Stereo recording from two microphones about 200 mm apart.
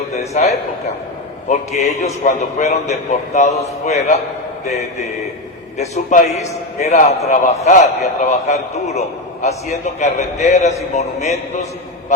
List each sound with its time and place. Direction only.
0.4 s a man's voice: 40° left (ahead or behind)
5.7 s a man's voice: 35° left (ahead or behind)